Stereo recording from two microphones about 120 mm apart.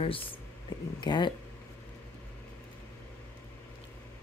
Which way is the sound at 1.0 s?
40° left (ahead or behind).